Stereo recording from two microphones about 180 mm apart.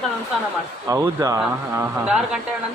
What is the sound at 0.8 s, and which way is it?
A man's voice, 15° right (ahead or behind).